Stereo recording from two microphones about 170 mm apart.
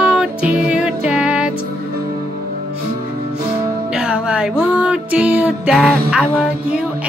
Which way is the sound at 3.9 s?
5° right (ahead or behind).